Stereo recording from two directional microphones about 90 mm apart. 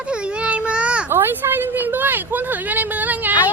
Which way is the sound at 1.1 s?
25° right (ahead or behind).